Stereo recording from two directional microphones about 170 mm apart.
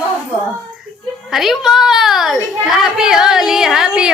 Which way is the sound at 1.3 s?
Centre (ahead or behind).